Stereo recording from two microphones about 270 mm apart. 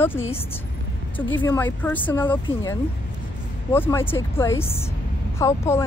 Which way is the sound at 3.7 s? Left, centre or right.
Centre.